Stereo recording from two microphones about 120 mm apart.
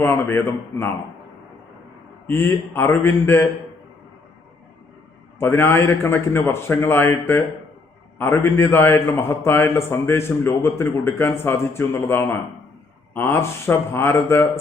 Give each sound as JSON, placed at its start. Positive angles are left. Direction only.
{"t": 0.0, "sound": "a man's voice", "side_deg": 20}
{"t": 2.2, "sound": "a man's voice", "side_deg": 20}
{"t": 5.4, "sound": "a man's voice", "side_deg": 20}